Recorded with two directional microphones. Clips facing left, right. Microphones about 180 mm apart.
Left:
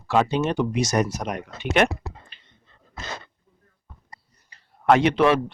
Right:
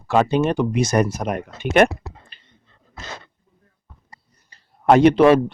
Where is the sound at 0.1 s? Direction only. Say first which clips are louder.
Right 4 dB; 50° right (ahead or behind).